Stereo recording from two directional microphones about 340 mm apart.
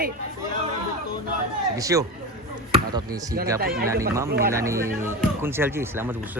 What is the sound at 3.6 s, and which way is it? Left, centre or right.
Speech, right.